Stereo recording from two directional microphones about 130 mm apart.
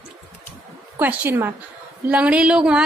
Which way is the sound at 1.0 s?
15° right (ahead or behind).